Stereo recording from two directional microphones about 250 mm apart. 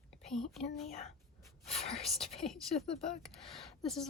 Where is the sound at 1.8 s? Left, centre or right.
Left.